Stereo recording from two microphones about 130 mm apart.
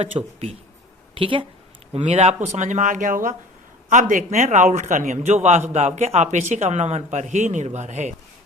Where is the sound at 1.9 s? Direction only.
60° right (ahead or behind); by 5.4 s 75° right (ahead or behind).